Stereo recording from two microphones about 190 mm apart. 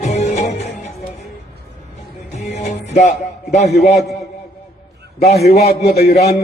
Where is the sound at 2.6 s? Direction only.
35° left (ahead or behind).